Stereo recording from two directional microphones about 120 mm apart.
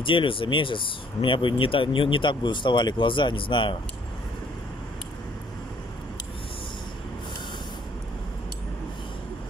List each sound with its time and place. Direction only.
0.0 s speech: 45° left (ahead or behind)